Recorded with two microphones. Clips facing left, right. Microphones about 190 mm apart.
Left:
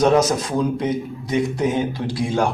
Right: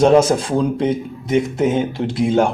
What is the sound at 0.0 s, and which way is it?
Speech, 25° right (ahead or behind).